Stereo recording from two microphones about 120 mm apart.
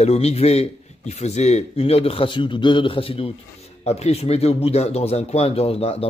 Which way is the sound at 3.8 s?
65° left (ahead or behind).